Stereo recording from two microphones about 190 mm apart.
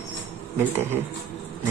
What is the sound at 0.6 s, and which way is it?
Speech, 10° right (ahead or behind).